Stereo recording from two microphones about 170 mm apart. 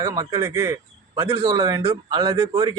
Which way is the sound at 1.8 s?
35° right (ahead or behind).